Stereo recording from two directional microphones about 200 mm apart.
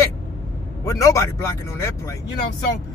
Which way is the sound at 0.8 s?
15° left (ahead or behind).